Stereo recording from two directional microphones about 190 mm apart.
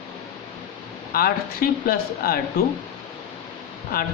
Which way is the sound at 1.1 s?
50° left (ahead or behind).